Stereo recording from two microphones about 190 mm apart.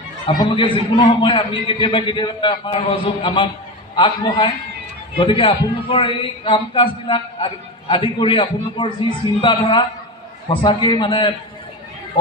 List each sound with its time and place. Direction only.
0.3 s a man's voice: 25° left (ahead or behind)